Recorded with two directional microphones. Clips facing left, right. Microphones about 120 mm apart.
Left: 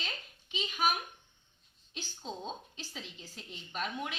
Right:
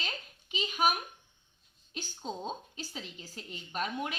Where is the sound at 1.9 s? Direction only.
45° right (ahead or behind).